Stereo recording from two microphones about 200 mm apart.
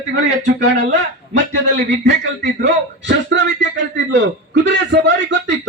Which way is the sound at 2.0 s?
60° right (ahead or behind).